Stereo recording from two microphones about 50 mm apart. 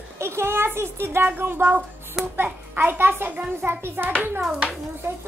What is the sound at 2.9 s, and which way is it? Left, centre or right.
A child's voice, right.